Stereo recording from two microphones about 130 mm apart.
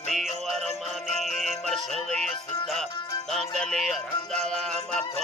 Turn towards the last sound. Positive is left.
turn(degrees=5)  # may be behind; listen again after turning